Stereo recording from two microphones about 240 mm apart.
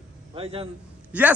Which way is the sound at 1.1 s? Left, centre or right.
Centre.